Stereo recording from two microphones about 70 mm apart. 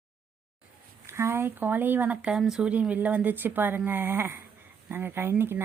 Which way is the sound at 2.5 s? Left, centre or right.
Centre.